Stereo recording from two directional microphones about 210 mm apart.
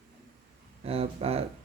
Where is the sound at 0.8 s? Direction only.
30° right (ahead or behind).